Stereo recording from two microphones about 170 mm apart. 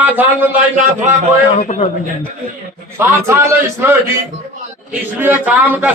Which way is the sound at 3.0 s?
15° right (ahead or behind).